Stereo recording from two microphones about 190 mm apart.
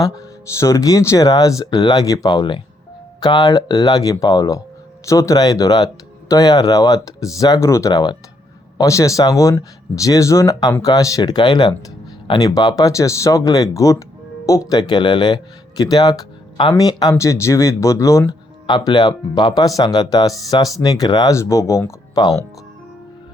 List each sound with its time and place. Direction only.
0.6 s speech: 15° left (ahead or behind)